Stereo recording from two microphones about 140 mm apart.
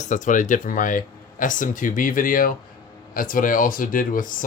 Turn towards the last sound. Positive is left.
turn(degrees=75)  # may be behind; listen again after turning